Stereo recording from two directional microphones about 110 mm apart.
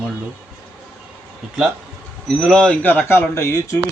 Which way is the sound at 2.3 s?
5° left (ahead or behind).